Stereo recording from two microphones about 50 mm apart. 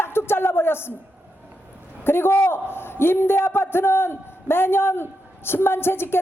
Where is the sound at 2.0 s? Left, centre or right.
Left.